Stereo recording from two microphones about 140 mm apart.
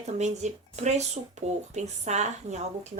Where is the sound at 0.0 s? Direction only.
55° right (ahead or behind).